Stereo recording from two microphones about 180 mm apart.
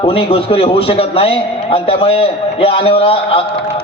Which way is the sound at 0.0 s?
30° left (ahead or behind).